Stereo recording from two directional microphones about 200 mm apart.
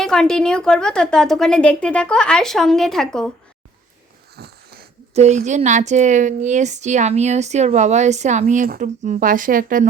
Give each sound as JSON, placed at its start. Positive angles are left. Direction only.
{"t": 0.0, "sound": "a woman's voice", "side_deg": 5}
{"t": 4.4, "sound": "wheeze", "side_deg": -50}
{"t": 5.1, "sound": "a woman's voice", "side_deg": -35}